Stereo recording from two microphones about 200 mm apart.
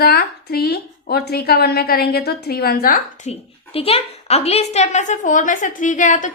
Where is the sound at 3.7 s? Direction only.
30° left (ahead or behind).